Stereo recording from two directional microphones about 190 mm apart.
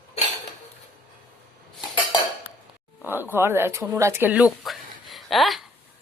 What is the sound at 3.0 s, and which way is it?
A woman's voice, 10° right (ahead or behind).